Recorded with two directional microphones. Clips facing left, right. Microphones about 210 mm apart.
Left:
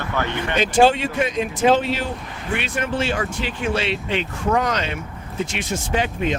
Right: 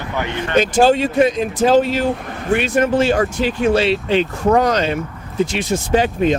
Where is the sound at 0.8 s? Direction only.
40° right (ahead or behind).